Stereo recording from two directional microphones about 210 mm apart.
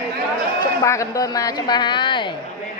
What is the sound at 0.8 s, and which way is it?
A woman's voice, 15° left (ahead or behind).